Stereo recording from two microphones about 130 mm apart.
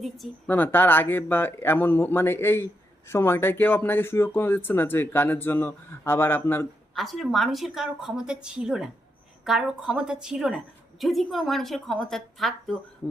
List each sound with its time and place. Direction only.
0.4 s speech: 15° left (ahead or behind)
6.9 s a woman's voice: centre (ahead or behind)